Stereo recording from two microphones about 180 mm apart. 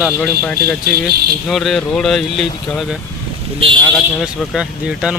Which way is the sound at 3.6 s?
30° right (ahead or behind).